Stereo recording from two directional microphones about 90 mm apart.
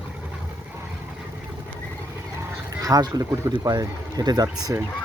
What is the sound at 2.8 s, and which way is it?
Speech, 45° right (ahead or behind).